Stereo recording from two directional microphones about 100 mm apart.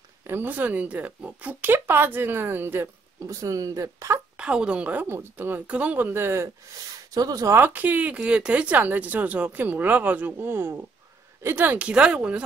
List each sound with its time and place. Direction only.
0.2 s speech: 20° right (ahead or behind)
4.4 s speech: 10° right (ahead or behind); by 6.8 s 25° right (ahead or behind)
7.2 s speech: 40° right (ahead or behind)
7.5 s speech: 20° right (ahead or behind)